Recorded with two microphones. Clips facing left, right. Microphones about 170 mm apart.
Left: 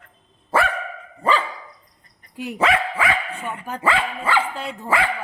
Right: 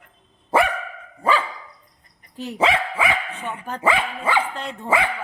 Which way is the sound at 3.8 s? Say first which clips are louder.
Right 1 dB; 20° right (ahead or behind).